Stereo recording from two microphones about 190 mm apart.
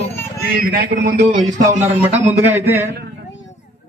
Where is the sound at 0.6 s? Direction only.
50° right (ahead or behind).